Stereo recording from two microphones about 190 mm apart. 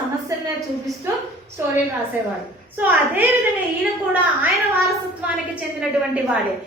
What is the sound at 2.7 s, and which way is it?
A woman's voice, 10° right (ahead or behind).